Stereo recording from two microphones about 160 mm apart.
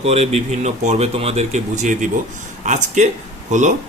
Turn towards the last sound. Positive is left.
turn(degrees=-50)  # may be behind; listen again after turning